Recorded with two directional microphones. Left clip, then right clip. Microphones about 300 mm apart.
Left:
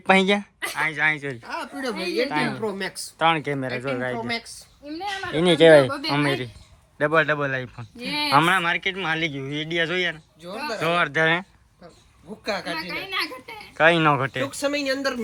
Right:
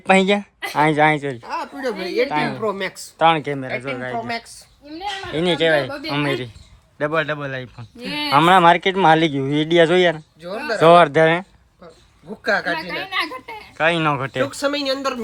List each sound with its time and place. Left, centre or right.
0.0 s speech: centre
12.5 s a woman's voice: right
13.7 s speech: centre
14.4 s speech: right